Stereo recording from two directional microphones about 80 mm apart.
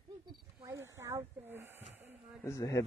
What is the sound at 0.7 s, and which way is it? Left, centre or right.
Snake, right.